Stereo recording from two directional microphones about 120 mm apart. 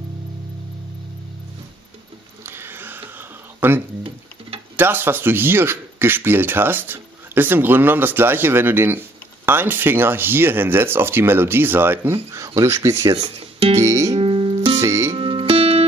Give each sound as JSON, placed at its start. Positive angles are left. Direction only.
{"t": 2.4, "sound": "a sound", "side_deg": -20}
{"t": 4.7, "sound": "speech", "side_deg": -15}
{"t": 13.2, "sound": "speech", "side_deg": -50}
{"t": 13.7, "sound": "music", "side_deg": -25}
{"t": 14.1, "sound": "music", "side_deg": -45}
{"t": 14.8, "sound": "music", "side_deg": -25}
{"t": 15.1, "sound": "music", "side_deg": -45}